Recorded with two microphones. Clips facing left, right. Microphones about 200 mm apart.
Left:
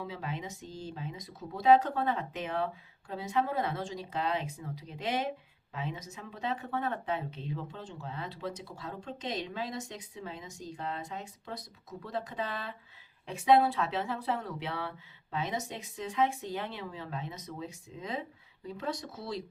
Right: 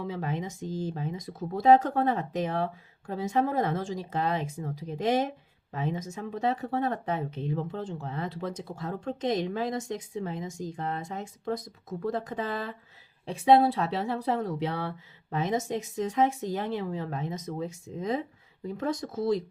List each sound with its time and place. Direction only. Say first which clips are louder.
0.1 s speech: right 6 dB; 50° right (ahead or behind)
13.2 s speech: right 4 dB; 35° right (ahead or behind); by 19.4 s 50° right (ahead or behind)